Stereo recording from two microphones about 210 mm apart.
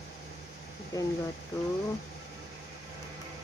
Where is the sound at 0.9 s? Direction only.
15° left (ahead or behind).